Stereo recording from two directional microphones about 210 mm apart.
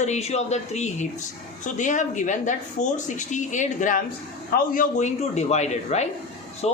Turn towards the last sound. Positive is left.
turn(degrees=30)  # may be behind; listen again after turning